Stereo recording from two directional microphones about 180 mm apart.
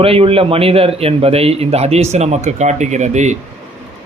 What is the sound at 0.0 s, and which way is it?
A man's voice, 30° right (ahead or behind).